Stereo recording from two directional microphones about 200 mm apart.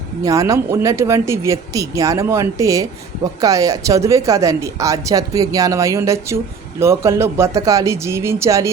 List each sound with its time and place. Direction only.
0.3 s speech: 15° right (ahead or behind)